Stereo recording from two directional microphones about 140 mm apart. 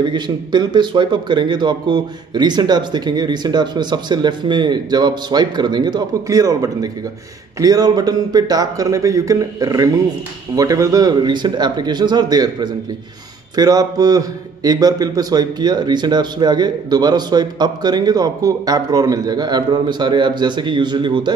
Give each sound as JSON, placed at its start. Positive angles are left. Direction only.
{"t": 0.0, "sound": "a man's voice", "side_deg": -35}